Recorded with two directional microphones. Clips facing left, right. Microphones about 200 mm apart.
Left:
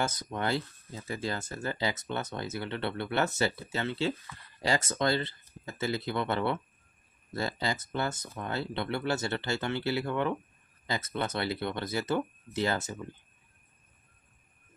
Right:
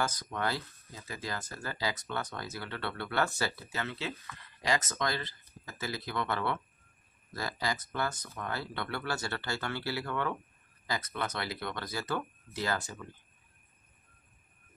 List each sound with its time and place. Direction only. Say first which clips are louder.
0.0 s speech: left 2 dB; 25° left (ahead or behind)